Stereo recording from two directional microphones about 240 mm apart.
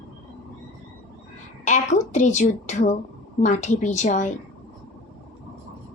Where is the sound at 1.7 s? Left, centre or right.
Left.